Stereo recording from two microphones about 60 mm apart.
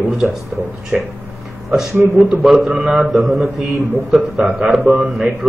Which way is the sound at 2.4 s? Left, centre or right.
Centre.